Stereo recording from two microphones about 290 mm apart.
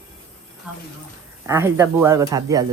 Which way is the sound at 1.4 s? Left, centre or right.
Centre.